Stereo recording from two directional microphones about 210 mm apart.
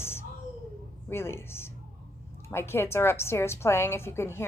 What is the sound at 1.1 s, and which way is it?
A woman's voice, 10° left (ahead or behind).